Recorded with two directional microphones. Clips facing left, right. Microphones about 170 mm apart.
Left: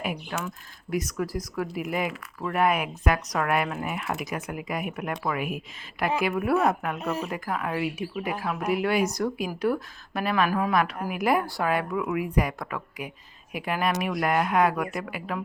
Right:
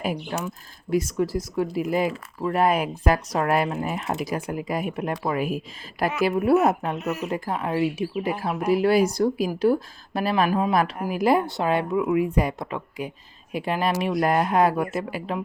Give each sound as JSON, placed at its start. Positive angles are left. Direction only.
{"t": 0.0, "sound": "speech", "side_deg": -35}
{"t": 7.0, "sound": "speech", "side_deg": 30}
{"t": 7.3, "sound": "speech", "side_deg": -30}
{"t": 10.5, "sound": "speech", "side_deg": -20}